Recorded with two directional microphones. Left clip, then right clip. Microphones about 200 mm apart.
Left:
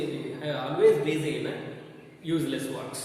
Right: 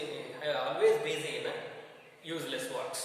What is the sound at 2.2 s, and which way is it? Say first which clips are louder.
Speech: left 7 dB; 10° right (ahead or behind).